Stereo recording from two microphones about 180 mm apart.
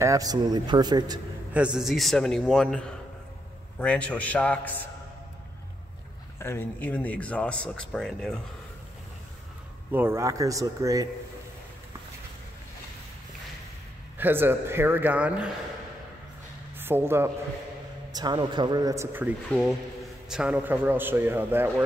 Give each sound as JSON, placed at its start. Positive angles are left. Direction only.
{"t": 0.0, "sound": "speech", "side_deg": -20}
{"t": 1.5, "sound": "a man's voice", "side_deg": -5}
{"t": 6.4, "sound": "speech", "side_deg": 10}
{"t": 9.8, "sound": "a man's voice", "side_deg": -10}
{"t": 14.1, "sound": "a man's voice", "side_deg": -10}
{"t": 16.7, "sound": "speech", "side_deg": -10}
{"t": 18.1, "sound": "a man's voice", "side_deg": -25}